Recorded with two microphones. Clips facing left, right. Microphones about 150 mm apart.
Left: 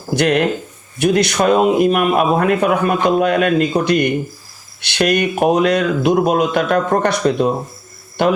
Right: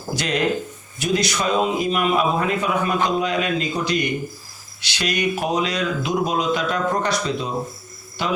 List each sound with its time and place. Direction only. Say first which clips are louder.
0.2 s speech: left 6 dB; 60° left (ahead or behind)